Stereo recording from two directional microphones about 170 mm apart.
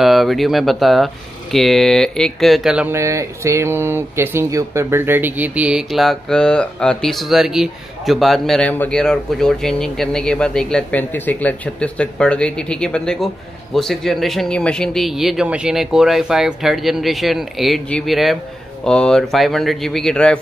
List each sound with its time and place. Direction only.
0.0 s speech: centre (ahead or behind)
2.9 s speech: 15° right (ahead or behind); by 20.3 s 5° left (ahead or behind)